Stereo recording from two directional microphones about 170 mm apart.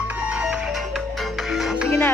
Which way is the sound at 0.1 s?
10° right (ahead or behind).